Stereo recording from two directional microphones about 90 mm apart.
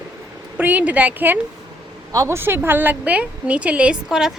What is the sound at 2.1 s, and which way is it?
Speech, 40° right (ahead or behind).